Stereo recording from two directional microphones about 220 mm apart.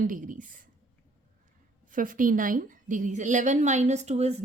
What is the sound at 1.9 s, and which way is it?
A woman's voice, 40° right (ahead or behind).